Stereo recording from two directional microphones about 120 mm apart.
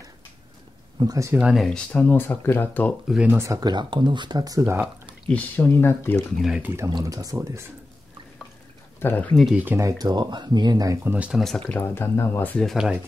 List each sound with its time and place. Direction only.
0.9 s speech: 30° right (ahead or behind)
1.3 s speech: 5° right (ahead or behind)
1.9 s speech: 15° left (ahead or behind)
3.3 s speech: 25° right (ahead or behind)
5.3 s speech: 20° left (ahead or behind)
6.1 s speech: centre (ahead or behind)
6.6 s speech: 20° right (ahead or behind)
6.9 s speech: 35° right (ahead or behind)
9.0 s speech: 15° left (ahead or behind)
9.8 s speech: 30° right (ahead or behind)
11.1 s speech: 10° right (ahead or behind)
11.3 s speech: 5° left (ahead or behind)
11.6 s speech: 15° left (ahead or behind)
12.6 s speech: 5° right (ahead or behind)